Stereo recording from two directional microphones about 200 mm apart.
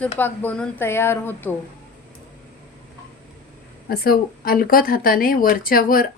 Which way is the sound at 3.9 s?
50° left (ahead or behind).